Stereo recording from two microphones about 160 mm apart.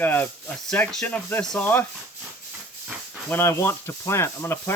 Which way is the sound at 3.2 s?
15° left (ahead or behind).